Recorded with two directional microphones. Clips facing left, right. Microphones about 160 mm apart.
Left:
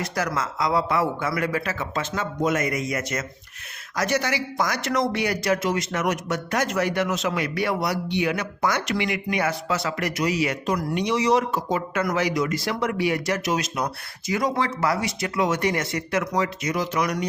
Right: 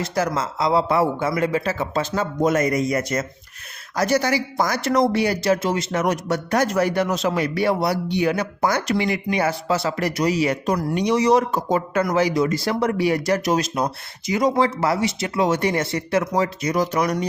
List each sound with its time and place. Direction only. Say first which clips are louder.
0.0 s speech: right 4 dB; 25° right (ahead or behind)
12.0 s speech: right 4 dB; 30° right (ahead or behind)